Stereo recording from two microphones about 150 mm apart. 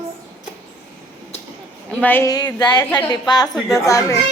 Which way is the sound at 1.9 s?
10° left (ahead or behind).